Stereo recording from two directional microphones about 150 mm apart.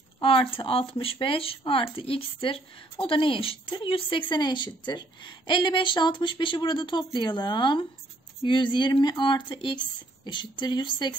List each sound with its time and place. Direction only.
0.2 s speech: 40° left (ahead or behind)